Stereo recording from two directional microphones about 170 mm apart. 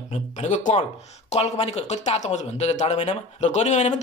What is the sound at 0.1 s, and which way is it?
Speech, 45° left (ahead or behind).